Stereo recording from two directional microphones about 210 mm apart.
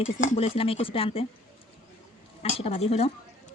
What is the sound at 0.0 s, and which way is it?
Speech, 35° left (ahead or behind).